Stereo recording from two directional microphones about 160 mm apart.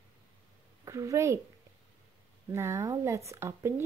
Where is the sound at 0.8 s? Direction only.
20° right (ahead or behind).